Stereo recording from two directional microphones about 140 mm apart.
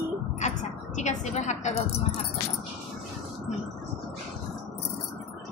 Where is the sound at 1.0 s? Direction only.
55° left (ahead or behind).